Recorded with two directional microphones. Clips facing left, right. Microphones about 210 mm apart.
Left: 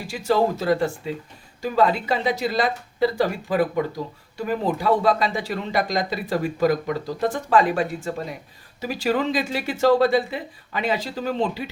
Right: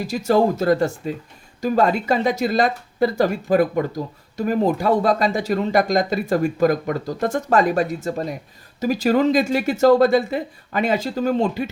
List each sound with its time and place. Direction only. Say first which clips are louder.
0.1 s speech: right 3 dB; 45° right (ahead or behind)